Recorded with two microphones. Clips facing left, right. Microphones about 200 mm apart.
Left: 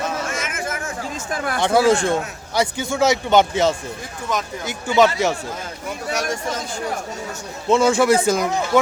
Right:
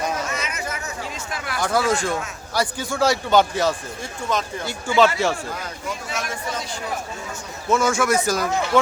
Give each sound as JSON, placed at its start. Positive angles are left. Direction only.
{"t": 0.3, "sound": "a sound", "side_deg": 50}
{"t": 1.5, "sound": "a man's voice", "side_deg": 25}
{"t": 6.1, "sound": "speech", "side_deg": 40}
{"t": 7.7, "sound": "a man's voice", "side_deg": 30}